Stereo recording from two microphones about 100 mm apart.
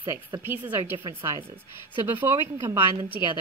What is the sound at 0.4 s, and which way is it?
Speech, 20° right (ahead or behind).